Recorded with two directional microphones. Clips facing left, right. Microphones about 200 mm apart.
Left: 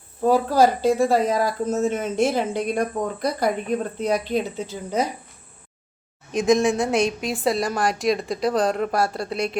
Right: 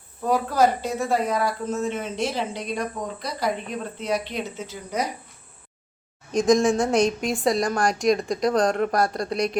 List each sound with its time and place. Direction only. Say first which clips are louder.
0.3 s speech: left 3 dB; 30° left (ahead or behind); by 3.5 s 55° left (ahead or behind)
3.9 s speech: left 2 dB; 40° left (ahead or behind)
6.3 s a woman's voice: even; 5° left (ahead or behind)